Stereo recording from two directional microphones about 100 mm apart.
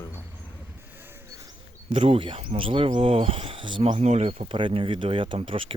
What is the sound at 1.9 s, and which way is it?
Speech, 70° right (ahead or behind).